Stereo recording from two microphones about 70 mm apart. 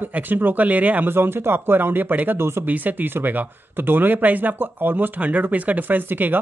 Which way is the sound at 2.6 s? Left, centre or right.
Right.